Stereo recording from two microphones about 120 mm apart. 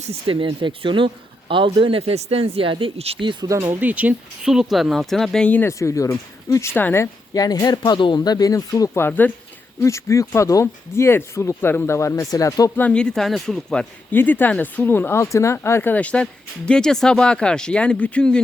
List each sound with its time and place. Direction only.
0.0 s speech: 50° right (ahead or behind)
3.5 s speech: 25° right (ahead or behind); by 5.7 s 15° left (ahead or behind)
5.8 s speech: 25° left (ahead or behind)
12.7 s speech: 10° left (ahead or behind)
14.1 s speech: 15° left (ahead or behind)